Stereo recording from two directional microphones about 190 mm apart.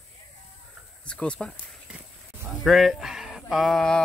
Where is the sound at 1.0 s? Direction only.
5° left (ahead or behind).